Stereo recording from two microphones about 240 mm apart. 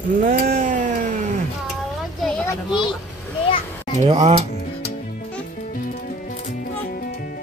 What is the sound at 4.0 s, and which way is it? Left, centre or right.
Speech, right.